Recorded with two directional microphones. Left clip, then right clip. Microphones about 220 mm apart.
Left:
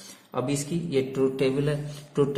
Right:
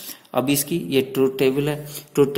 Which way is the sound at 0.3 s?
35° right (ahead or behind).